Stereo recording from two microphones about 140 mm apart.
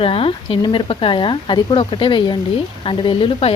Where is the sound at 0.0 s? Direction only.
40° left (ahead or behind).